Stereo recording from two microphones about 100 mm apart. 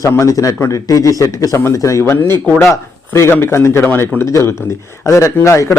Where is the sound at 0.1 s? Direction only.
35° left (ahead or behind).